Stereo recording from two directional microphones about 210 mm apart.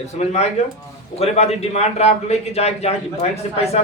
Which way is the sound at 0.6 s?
30° left (ahead or behind).